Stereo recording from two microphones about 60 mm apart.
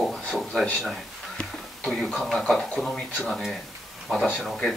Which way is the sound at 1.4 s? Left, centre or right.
Centre.